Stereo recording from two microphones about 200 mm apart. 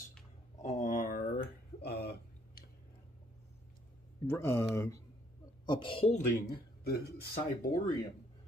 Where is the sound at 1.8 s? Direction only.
55° left (ahead or behind).